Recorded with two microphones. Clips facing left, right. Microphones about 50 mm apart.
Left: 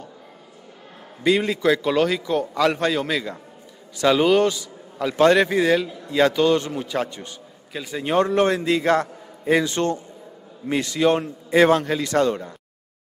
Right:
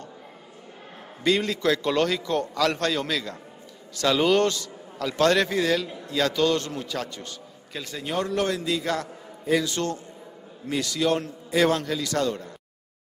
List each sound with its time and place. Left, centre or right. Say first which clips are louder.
1.2 s a man's voice: left 4 dB; centre
7.7 s a man's voice: left 5 dB; centre
8.0 s a man's voice: left 7 dB; left